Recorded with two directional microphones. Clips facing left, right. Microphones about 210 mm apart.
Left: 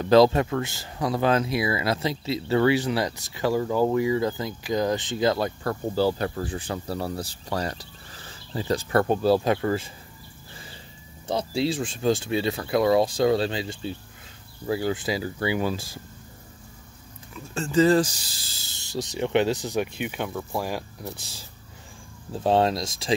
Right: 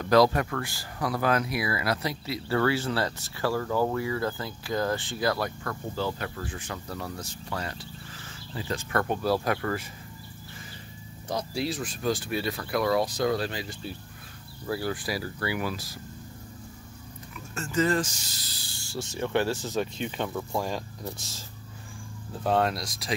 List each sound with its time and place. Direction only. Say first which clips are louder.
0.0 s speech: left 4 dB; 25° left (ahead or behind)
5.6 s speech: left 8 dB; 35° left (ahead or behind)
11.2 s speech: left 5 dB; 25° left (ahead or behind)
17.6 s speech: left 7 dB; 30° left (ahead or behind); by 21.5 s 10° left (ahead or behind)
22.4 s speech: left 4 dB; 25° left (ahead or behind)